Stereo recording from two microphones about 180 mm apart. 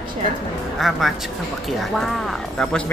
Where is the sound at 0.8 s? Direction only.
Centre (ahead or behind).